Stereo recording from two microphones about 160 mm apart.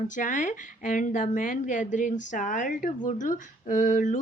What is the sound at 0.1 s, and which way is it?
A woman's voice, 55° left (ahead or behind).